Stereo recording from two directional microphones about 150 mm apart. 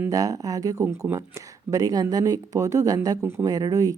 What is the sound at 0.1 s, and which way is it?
Speech, 25° right (ahead or behind).